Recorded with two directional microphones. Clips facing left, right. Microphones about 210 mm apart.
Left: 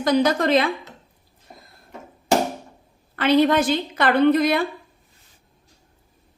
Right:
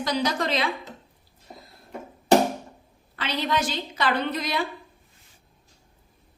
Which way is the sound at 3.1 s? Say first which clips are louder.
Left 10 dB; 55° left (ahead or behind).